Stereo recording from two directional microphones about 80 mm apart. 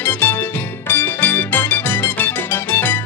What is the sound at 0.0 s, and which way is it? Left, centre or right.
Music, left.